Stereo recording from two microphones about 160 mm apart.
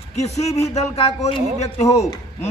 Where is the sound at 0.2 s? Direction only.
45° left (ahead or behind).